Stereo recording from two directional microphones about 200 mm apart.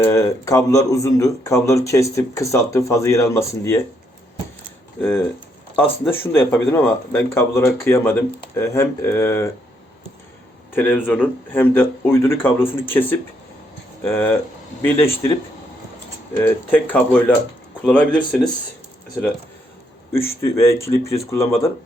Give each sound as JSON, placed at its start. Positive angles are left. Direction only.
{"t": 0.0, "sound": "speech", "side_deg": 15}
{"t": 4.9, "sound": "speech", "side_deg": 10}
{"t": 10.8, "sound": "speech", "side_deg": 5}
{"t": 16.4, "sound": "speech", "side_deg": 10}
{"t": 20.1, "sound": "speech", "side_deg": 15}